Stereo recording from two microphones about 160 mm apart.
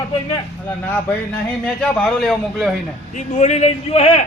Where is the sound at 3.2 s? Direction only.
50° left (ahead or behind).